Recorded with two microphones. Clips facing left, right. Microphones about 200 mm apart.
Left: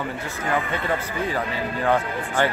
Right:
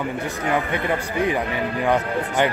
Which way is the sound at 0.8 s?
15° right (ahead or behind).